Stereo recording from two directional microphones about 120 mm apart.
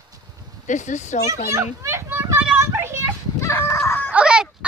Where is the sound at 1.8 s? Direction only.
20° right (ahead or behind).